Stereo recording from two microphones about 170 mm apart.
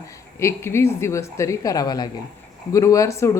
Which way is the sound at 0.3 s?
15° left (ahead or behind).